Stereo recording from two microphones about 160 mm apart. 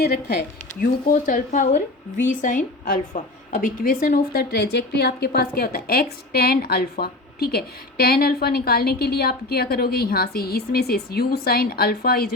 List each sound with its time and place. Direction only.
0.8 s a woman's voice: 55° left (ahead or behind)